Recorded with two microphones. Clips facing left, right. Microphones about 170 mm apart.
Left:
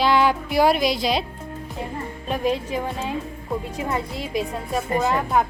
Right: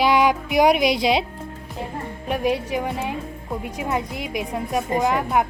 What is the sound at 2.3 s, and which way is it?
A woman's voice, 15° right (ahead or behind).